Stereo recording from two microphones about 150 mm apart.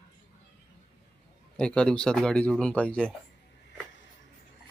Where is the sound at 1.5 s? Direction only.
5° left (ahead or behind).